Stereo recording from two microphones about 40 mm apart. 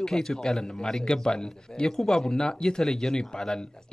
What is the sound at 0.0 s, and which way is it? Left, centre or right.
A man's voice, centre.